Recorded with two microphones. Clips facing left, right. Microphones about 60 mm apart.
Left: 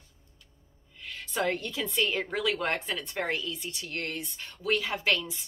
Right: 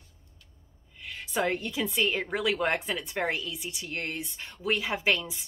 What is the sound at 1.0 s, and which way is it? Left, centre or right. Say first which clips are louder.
A woman's voice: right 1 dB; centre.